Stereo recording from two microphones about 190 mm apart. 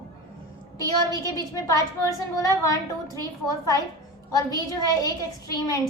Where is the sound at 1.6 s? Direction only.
20° left (ahead or behind).